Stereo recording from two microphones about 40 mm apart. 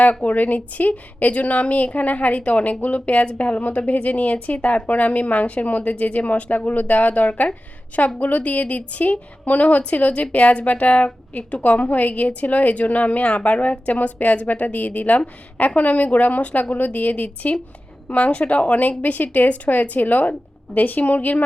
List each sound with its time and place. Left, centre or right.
0.0 s speech: left